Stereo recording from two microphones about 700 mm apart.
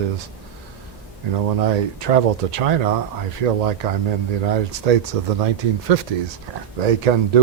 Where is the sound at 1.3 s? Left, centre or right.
Right.